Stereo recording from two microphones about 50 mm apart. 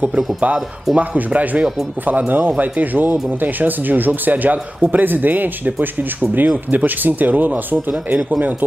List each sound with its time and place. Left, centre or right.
0.0 s speech: right
6.7 s speech: right